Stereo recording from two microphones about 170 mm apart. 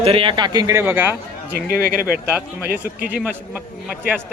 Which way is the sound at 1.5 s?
60° right (ahead or behind).